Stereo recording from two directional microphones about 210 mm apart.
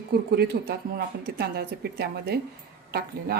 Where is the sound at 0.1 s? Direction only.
50° right (ahead or behind).